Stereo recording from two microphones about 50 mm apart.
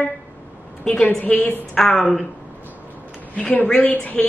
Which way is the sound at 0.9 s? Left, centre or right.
Centre.